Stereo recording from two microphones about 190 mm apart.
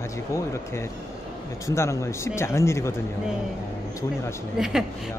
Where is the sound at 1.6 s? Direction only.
15° left (ahead or behind).